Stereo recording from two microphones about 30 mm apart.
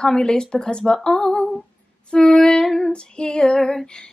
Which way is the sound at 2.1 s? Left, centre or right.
Left.